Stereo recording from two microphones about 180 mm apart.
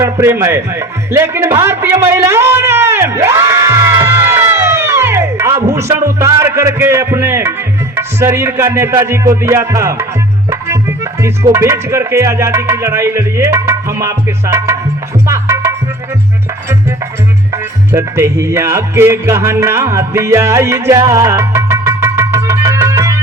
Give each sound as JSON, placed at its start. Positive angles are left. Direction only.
{"t": 0.0, "sound": "a man's voice", "side_deg": -15}
{"t": 7.9, "sound": "music", "side_deg": -15}
{"t": 17.5, "sound": "music", "side_deg": -15}